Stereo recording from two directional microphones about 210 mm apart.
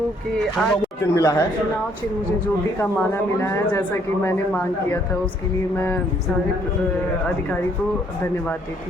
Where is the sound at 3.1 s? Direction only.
10° left (ahead or behind).